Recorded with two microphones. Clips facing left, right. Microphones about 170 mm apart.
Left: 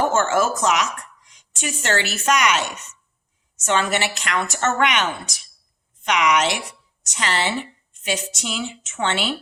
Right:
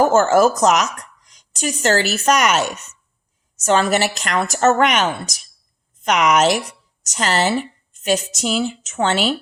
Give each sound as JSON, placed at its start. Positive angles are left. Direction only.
{"t": 0.0, "sound": "a woman's voice", "side_deg": -40}